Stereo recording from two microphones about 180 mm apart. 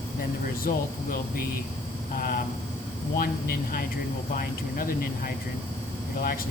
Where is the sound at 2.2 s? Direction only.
55° left (ahead or behind).